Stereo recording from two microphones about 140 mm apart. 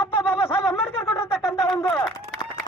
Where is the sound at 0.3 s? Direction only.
15° left (ahead or behind).